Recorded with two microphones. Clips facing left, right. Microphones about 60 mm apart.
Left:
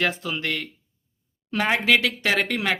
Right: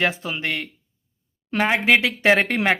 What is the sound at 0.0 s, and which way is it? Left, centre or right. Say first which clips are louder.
Speech: right 2 dB; right.